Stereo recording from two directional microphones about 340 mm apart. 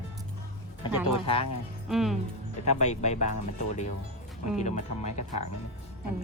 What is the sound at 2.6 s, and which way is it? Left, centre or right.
Speech, centre.